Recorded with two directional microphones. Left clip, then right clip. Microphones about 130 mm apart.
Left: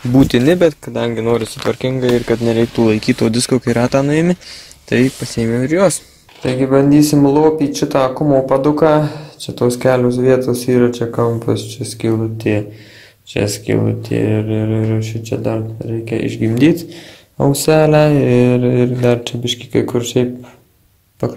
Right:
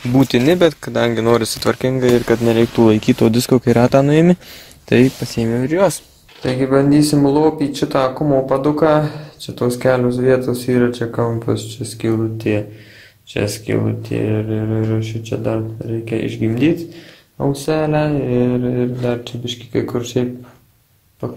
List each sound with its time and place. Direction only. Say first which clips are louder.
0.2 s speech: left 1 dB; 25° left (ahead or behind)
0.8 s speech: right 2 dB; 5° right (ahead or behind)
1.7 s speech: even; 5° right (ahead or behind)
2.8 s speech: right 2 dB; 15° right (ahead or behind)
5.2 s speech: left 2 dB; centre (ahead or behind); by 5.9 s 15° left (ahead or behind)
6.4 s speech: left 2 dB; 5° left (ahead or behind); by 14.9 s 30° left (ahead or behind)
14.9 s speech: left 1 dB; 15° left (ahead or behind)
17.5 s speech: left 6 dB; 45° left (ahead or behind)